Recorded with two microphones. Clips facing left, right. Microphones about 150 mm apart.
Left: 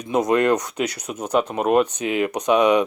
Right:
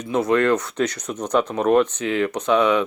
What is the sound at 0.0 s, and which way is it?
Speech, 15° left (ahead or behind).